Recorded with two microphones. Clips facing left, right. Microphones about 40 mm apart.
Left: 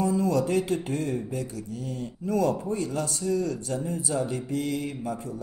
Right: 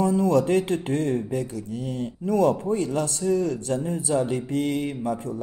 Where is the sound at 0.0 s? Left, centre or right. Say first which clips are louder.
Right 4 dB; right.